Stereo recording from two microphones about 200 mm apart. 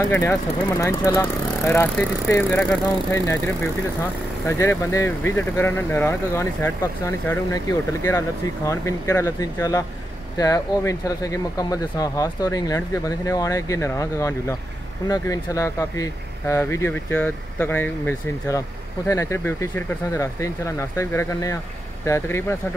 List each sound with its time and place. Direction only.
0.1 s speech: 10° left (ahead or behind)
4.5 s speech: 15° left (ahead or behind)